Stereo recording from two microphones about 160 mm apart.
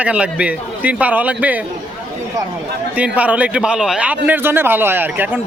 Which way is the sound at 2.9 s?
10° right (ahead or behind).